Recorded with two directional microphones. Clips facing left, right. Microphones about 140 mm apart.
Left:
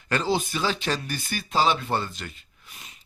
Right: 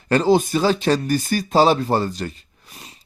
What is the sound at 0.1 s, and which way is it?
Speech, 40° right (ahead or behind).